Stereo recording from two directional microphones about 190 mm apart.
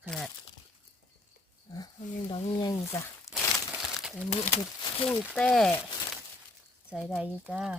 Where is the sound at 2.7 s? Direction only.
15° left (ahead or behind).